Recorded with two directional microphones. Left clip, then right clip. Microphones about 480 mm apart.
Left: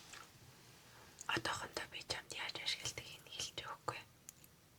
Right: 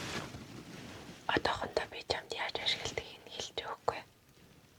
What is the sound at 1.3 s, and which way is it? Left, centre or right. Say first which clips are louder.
Whispering: right 7 dB; centre.